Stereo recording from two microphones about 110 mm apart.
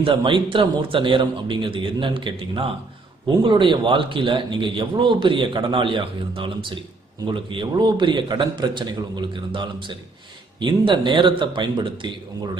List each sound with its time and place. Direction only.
0.0 s speech: 50° right (ahead or behind)